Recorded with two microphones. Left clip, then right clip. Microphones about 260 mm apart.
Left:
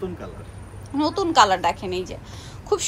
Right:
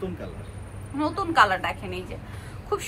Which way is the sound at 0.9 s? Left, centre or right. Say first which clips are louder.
Left 3 dB; left.